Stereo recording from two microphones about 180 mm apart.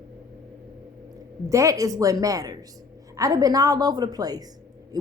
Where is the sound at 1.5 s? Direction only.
15° right (ahead or behind).